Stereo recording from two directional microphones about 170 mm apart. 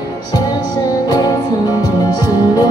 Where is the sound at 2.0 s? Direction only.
25° left (ahead or behind).